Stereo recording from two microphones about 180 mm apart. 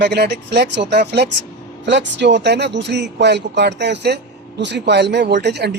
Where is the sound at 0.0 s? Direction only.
70° right (ahead or behind).